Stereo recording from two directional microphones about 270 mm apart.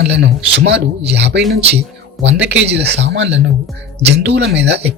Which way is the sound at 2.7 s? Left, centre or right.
Right.